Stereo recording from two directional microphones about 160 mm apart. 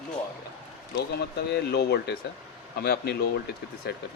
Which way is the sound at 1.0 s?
90° left.